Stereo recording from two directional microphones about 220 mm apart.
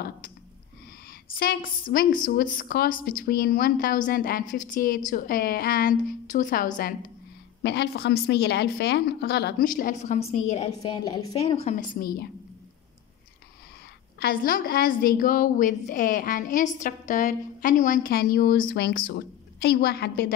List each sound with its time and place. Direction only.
1.4 s a woman's voice: 40° left (ahead or behind)
7.6 s a woman's voice: 50° left (ahead or behind); by 11.8 s 30° left (ahead or behind)
12.0 s a woman's voice: 45° left (ahead or behind)
14.2 s a woman's voice: 40° left (ahead or behind)